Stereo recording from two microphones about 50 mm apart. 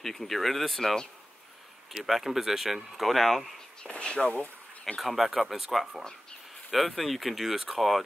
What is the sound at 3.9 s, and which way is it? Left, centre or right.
Speech, left.